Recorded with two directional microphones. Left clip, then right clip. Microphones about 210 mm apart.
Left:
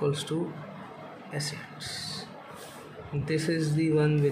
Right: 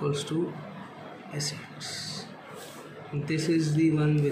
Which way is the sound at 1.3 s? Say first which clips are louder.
Even; 45° left (ahead or behind).